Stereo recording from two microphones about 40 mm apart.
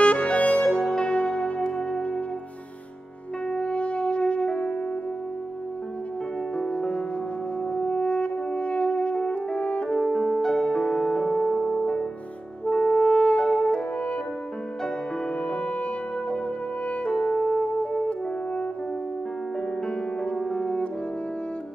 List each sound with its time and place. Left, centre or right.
0.0 s music: left
3.4 s music: left
6.5 s music: left
7.7 s french horn: left
9.6 s music: left
12.9 s french horn: left
15.4 s french horn: left
17.0 s music: left
20.5 s french horn: left